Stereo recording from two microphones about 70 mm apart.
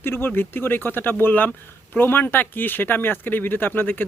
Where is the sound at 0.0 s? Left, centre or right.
Left.